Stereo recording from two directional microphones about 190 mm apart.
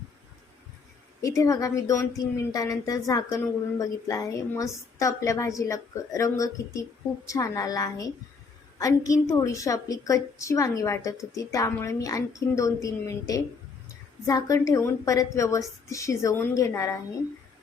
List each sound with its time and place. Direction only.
1.4 s speech: 20° left (ahead or behind)